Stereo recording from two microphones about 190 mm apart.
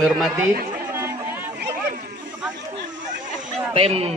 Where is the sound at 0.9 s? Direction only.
15° right (ahead or behind).